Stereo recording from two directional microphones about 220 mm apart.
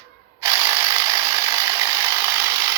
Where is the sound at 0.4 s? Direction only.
20° right (ahead or behind).